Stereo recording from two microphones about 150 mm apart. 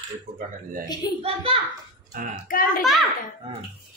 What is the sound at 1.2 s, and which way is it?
Speech, 40° right (ahead or behind).